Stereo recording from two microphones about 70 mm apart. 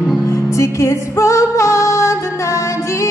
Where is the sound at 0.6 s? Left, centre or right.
Left.